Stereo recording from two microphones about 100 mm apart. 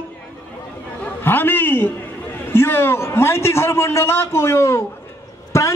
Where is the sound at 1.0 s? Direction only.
20° left (ahead or behind).